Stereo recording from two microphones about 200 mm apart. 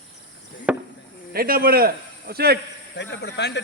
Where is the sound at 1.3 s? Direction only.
45° right (ahead or behind).